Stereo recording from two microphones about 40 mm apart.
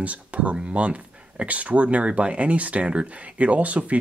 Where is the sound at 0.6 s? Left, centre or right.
Right.